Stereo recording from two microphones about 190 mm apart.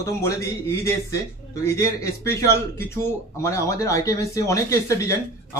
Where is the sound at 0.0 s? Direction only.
15° left (ahead or behind).